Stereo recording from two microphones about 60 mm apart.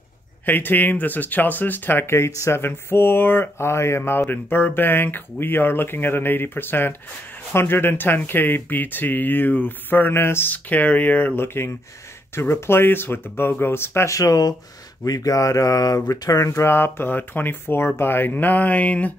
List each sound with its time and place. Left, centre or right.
0.5 s speech: left
2.0 s speech: left
10.5 s speech: left
11.4 s speech: left
14.1 s speech: left
16.6 s speech: left